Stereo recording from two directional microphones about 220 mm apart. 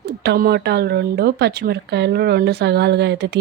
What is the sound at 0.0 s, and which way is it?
Speech, 50° right (ahead or behind).